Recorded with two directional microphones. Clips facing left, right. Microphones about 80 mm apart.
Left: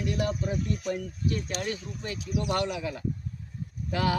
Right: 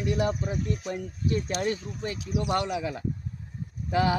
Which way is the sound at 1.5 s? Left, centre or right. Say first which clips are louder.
Right 4 dB; right.